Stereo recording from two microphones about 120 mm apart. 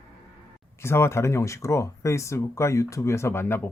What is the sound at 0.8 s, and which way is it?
Speech, 20° left (ahead or behind).